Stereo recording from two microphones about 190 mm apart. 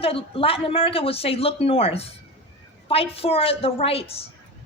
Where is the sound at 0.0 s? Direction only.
30° left (ahead or behind).